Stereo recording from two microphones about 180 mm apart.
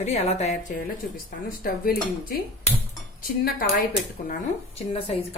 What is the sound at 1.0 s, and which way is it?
Speech, 60° left (ahead or behind).